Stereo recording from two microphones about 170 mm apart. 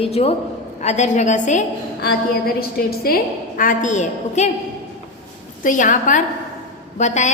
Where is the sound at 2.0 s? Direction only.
65° left (ahead or behind); by 4.5 s 45° left (ahead or behind).